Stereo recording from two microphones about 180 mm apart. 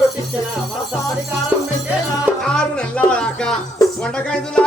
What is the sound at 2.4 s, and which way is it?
Music, 5° left (ahead or behind).